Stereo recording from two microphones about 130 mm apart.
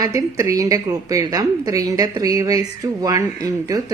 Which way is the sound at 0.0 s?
25° right (ahead or behind).